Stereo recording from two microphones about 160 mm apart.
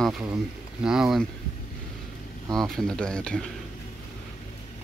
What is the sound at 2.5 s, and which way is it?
Speech, centre (ahead or behind).